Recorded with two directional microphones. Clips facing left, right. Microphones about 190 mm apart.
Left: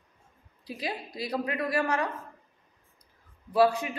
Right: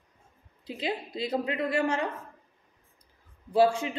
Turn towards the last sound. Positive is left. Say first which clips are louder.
# even
turn(degrees=-25)  # may be behind; listen again after turning